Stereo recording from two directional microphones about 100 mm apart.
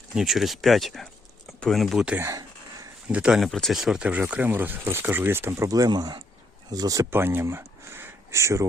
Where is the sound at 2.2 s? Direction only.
35° right (ahead or behind).